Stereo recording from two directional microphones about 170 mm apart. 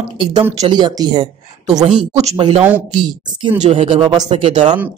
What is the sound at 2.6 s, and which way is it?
Speech, 10° right (ahead or behind).